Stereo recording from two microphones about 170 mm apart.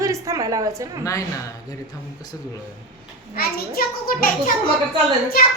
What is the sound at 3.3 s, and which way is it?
A child's voice, 60° left (ahead or behind).